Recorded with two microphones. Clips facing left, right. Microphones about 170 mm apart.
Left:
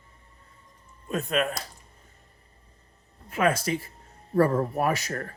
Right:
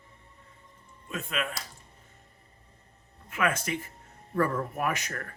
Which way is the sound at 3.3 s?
35° left (ahead or behind).